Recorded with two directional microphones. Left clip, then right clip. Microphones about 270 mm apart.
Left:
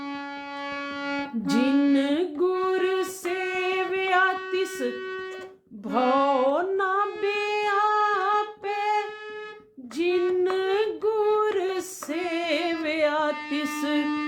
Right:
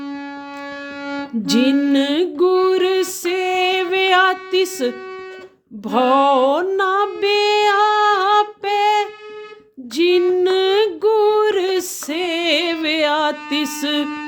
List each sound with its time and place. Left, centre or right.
1.0 s music: centre
1.9 s music: right
9.9 s female singing: right
10.3 s a sound: right